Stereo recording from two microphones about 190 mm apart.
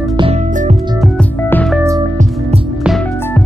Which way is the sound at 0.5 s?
40° right (ahead or behind).